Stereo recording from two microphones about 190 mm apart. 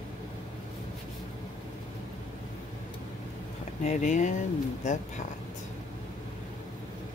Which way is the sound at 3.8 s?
40° left (ahead or behind).